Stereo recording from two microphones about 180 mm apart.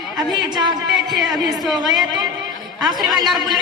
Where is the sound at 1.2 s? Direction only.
Centre (ahead or behind).